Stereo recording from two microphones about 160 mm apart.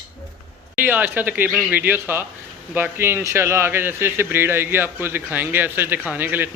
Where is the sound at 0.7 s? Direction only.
10° right (ahead or behind).